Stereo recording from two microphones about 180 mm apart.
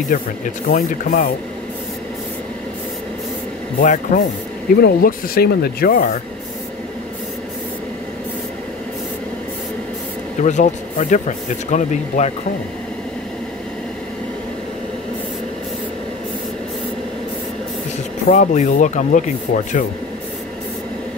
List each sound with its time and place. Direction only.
0.1 s speech: 50° left (ahead or behind)
3.8 s speech: 45° left (ahead or behind)
4.8 s speech: 60° left (ahead or behind)
10.4 s speech: 45° left (ahead or behind)
18.3 s speech: 40° left (ahead or behind)